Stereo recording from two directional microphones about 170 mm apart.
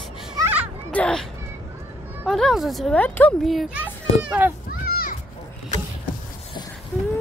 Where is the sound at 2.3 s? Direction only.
Centre (ahead or behind).